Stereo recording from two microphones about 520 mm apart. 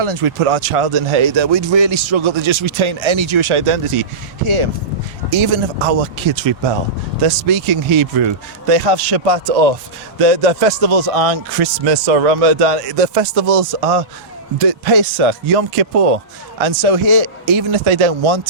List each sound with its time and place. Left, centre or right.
0.0 s speech: right
7.5 s speech: right
8.7 s speech: right
10.2 s a man's voice: right
14.7 s speech: right
16.6 s speech: right